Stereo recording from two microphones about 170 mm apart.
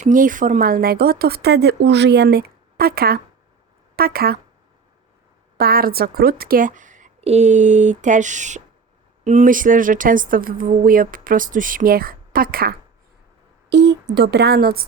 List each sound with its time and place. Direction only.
0.0 s speech: 50° right (ahead or behind)
5.5 s speech: 60° right (ahead or behind)
13.7 s speech: 90° right; by 14.8 s 65° right (ahead or behind)